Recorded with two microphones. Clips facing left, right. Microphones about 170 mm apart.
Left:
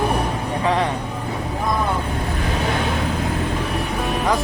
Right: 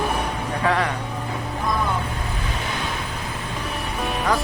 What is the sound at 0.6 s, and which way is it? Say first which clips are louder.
Speech: left 1 dB; 20° left (ahead or behind).